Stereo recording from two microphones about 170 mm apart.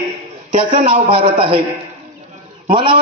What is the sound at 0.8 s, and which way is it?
Speech, 30° right (ahead or behind).